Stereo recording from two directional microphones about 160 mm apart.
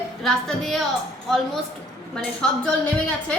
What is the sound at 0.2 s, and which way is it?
Speech, centre (ahead or behind).